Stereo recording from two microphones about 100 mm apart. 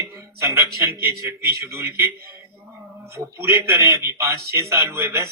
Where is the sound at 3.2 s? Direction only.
30° right (ahead or behind).